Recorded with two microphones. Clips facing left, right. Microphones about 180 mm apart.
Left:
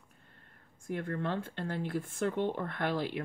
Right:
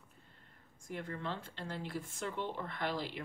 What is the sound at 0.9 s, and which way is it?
Speech, 55° left (ahead or behind).